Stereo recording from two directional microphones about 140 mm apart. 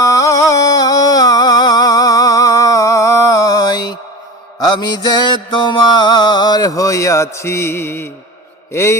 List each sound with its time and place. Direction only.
0.0 s music: 25° left (ahead or behind)